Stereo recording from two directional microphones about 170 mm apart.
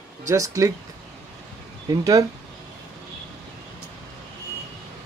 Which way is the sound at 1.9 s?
20° right (ahead or behind).